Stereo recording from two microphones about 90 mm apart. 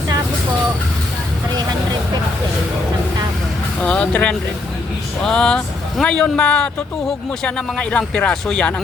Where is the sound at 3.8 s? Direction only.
15° left (ahead or behind).